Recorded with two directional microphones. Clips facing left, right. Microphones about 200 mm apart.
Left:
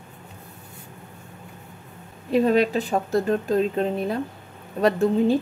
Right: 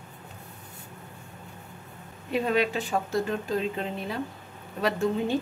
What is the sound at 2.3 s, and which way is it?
Speech, 40° left (ahead or behind).